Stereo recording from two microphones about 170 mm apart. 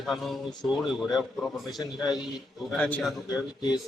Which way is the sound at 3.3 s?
25° left (ahead or behind).